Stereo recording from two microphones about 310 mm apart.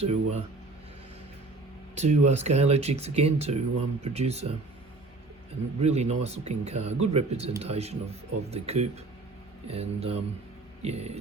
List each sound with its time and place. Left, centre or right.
0.0 s speech: centre
2.0 s speech: right
5.8 s speech: right